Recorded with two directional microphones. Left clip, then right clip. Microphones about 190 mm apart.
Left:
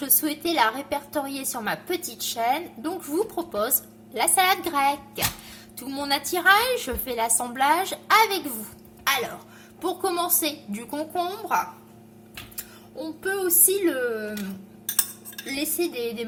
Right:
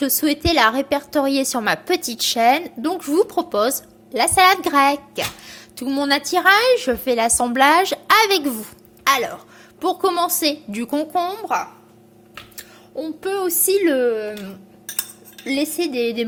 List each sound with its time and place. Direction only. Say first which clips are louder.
0.0 s a woman's voice: right 8 dB; 35° right (ahead or behind)
15.4 s a woman's voice: right 6 dB; 40° right (ahead or behind)